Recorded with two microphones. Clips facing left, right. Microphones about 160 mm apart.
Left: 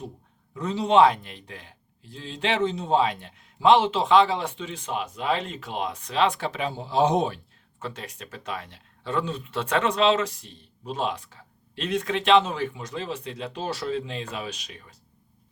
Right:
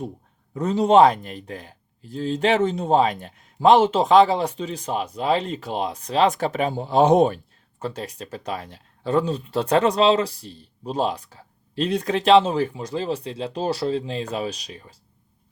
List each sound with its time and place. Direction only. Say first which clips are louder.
0.5 s speech: right 5 dB; 45° right (ahead or behind)